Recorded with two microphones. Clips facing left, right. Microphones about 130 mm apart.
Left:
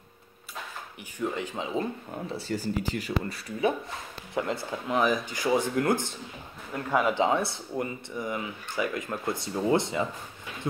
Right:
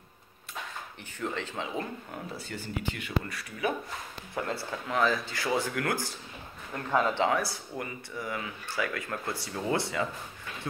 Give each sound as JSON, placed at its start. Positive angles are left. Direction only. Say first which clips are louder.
{"t": 1.2, "sound": "speech", "louder": "left 3 dB", "side_deg": 15}
{"t": 2.3, "sound": "speech", "louder": "left 9 dB", "side_deg": 35}
{"t": 4.4, "sound": "speech", "louder": "left 3 dB", "side_deg": 20}
{"t": 6.7, "sound": "speech", "louder": "left 2 dB", "side_deg": 10}
{"t": 7.2, "sound": "speech", "louder": "left 2 dB", "side_deg": 25}